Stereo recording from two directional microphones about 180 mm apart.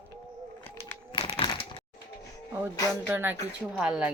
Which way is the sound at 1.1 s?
30° left (ahead or behind).